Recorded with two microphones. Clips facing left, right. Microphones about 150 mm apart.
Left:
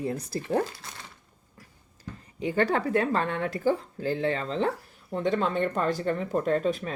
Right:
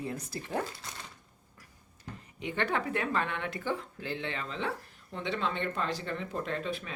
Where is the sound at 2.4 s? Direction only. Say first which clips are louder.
Left 7 dB; 35° left (ahead or behind).